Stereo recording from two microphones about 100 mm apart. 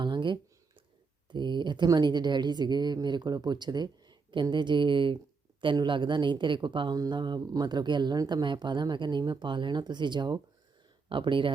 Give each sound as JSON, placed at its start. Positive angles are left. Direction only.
{"t": 0.0, "sound": "a sound", "side_deg": -50}
{"t": 1.3, "sound": "a woman's voice", "side_deg": -50}
{"t": 11.1, "sound": "speech", "side_deg": -55}